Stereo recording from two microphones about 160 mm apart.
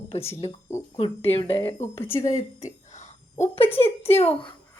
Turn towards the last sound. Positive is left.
turn(degrees=40)  # may be behind; listen again after turning